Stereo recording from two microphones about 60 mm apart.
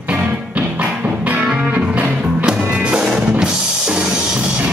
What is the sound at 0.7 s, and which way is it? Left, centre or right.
Music, right.